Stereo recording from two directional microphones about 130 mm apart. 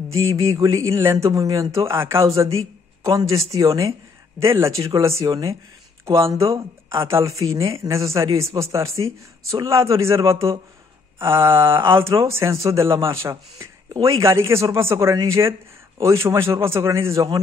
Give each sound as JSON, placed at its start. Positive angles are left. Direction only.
{"t": 0.6, "sound": "speech", "side_deg": -25}
{"t": 3.0, "sound": "a sound", "side_deg": -30}
{"t": 3.3, "sound": "speech", "side_deg": -25}